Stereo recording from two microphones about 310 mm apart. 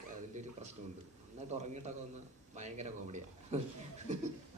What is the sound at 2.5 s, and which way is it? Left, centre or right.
A man's voice, right.